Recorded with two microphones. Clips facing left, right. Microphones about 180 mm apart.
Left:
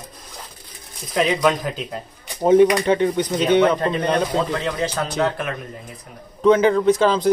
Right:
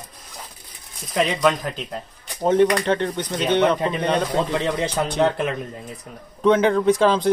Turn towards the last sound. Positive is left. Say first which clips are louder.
# left 1 dB
turn(degrees=0)  # may be behind; listen again after turning